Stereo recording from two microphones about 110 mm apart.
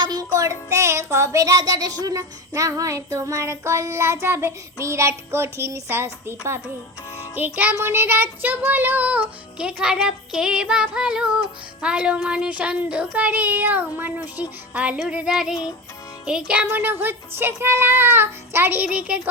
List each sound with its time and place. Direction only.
0.0 s child singing: 35° right (ahead or behind); by 19.3 s 10° right (ahead or behind)